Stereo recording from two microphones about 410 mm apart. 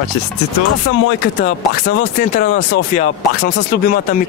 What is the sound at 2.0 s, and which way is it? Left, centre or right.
Speech, centre.